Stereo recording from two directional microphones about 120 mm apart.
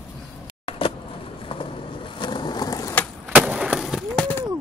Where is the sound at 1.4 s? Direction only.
45° left (ahead or behind); by 2.9 s 30° left (ahead or behind).